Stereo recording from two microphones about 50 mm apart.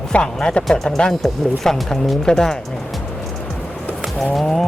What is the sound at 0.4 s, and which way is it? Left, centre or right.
Speech, centre.